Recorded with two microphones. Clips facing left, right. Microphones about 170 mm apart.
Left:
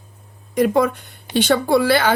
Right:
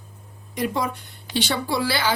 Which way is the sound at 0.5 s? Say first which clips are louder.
Left 9 dB; 50° left (ahead or behind).